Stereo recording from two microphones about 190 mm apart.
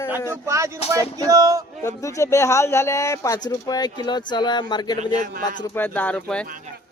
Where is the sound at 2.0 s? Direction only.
15° left (ahead or behind).